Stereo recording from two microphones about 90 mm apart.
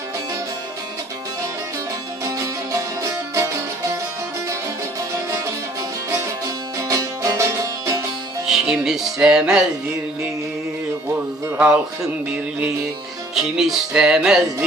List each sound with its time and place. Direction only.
2.2 s music: 35° right (ahead or behind)
6.8 s music: 35° right (ahead or behind)
8.4 s music: 5° right (ahead or behind)
13.3 s music: 5° right (ahead or behind)